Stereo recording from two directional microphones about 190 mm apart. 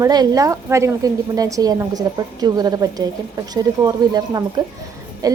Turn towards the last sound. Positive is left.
turn(degrees=-20)  # may be behind; listen again after turning